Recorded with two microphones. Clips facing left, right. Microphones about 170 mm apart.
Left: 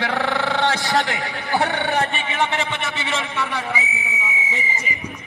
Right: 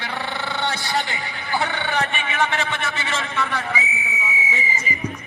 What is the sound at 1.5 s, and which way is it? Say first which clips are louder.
A man's voice: left 3 dB; 40° left (ahead or behind).